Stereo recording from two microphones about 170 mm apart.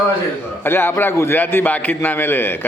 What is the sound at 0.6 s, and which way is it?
A man's voice, 15° left (ahead or behind).